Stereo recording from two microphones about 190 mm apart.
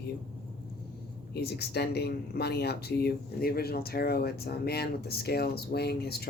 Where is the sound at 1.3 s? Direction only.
60° left (ahead or behind).